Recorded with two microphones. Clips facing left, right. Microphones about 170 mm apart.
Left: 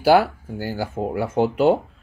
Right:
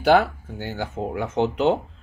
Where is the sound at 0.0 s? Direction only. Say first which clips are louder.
Left 2 dB; 10° left (ahead or behind).